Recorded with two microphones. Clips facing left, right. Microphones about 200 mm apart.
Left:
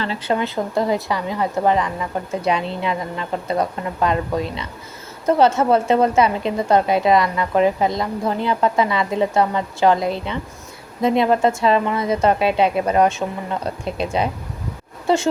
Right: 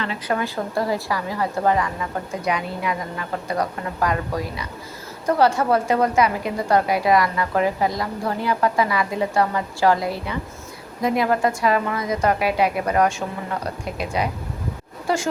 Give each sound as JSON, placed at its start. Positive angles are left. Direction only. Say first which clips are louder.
{"t": 0.0, "sound": "a woman's voice", "louder": "left 3 dB", "side_deg": 30}